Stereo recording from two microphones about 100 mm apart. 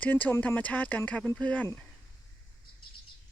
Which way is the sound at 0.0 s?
20° left (ahead or behind).